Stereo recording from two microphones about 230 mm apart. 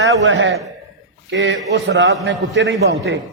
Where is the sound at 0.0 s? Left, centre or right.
Right.